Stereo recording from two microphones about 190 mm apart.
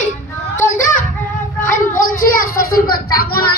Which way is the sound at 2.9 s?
50° left (ahead or behind).